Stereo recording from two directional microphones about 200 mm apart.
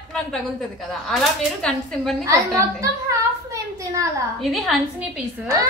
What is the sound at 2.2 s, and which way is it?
A woman's voice, 15° right (ahead or behind).